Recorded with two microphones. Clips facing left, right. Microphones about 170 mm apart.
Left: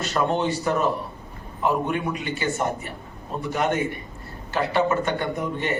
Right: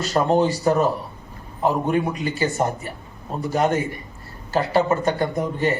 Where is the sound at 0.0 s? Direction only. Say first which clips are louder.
Right 5 dB; 40° right (ahead or behind).